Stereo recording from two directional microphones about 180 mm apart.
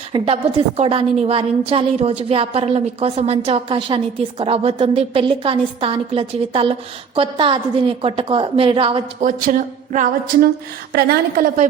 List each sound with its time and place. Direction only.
0.1 s a woman's voice: 30° right (ahead or behind)
9.2 s speech: 45° right (ahead or behind)
10.9 s speech: 55° right (ahead or behind)